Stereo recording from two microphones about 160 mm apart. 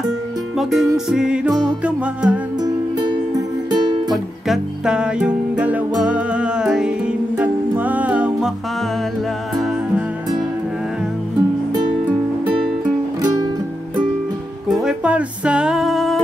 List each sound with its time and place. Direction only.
0.6 s music: centre (ahead or behind)
1.5 s music: 25° right (ahead or behind)
1.9 s music: 10° right (ahead or behind)
2.6 s music: 25° right (ahead or behind)
4.1 s music: 5° right (ahead or behind)
14.7 s music: 5° right (ahead or behind)